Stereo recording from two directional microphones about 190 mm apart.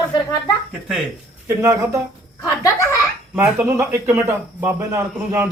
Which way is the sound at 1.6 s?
15° right (ahead or behind).